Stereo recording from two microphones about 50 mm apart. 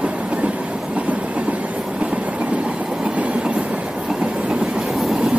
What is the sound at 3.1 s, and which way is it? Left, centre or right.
Train, right.